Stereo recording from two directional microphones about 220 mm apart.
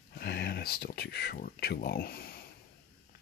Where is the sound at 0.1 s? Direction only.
45° left (ahead or behind).